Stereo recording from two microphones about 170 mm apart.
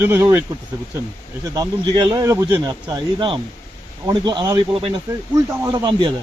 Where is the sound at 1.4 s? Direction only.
20° right (ahead or behind).